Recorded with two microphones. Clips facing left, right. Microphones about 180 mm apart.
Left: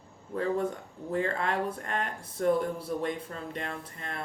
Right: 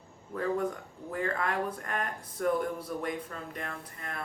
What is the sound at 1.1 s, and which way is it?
Speech, 25° left (ahead or behind).